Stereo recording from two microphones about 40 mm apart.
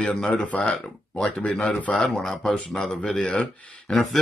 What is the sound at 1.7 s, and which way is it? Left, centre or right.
Speech, left.